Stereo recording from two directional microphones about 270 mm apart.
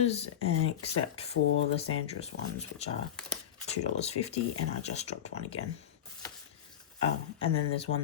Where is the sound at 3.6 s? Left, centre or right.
Left.